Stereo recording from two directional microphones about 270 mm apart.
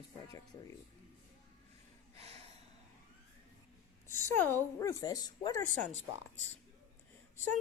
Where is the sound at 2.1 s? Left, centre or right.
Right.